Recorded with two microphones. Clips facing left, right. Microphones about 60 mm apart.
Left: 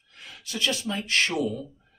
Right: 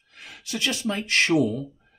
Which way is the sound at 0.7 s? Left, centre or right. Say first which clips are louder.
Right 2 dB; right.